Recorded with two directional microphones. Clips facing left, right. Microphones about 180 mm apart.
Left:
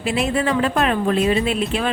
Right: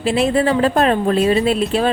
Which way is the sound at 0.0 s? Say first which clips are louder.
Right 5 dB; 30° right (ahead or behind).